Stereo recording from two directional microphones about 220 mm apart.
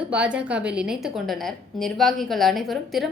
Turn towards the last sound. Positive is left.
turn(degrees=0)  # may be behind; listen again after turning